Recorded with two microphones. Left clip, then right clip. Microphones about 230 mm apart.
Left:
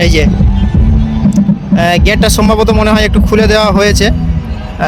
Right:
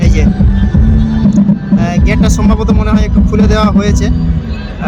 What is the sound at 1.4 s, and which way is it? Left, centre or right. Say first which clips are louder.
Speech: left 1 dB; left.